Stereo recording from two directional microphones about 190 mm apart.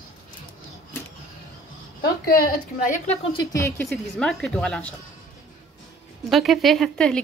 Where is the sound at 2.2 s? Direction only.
50° left (ahead or behind).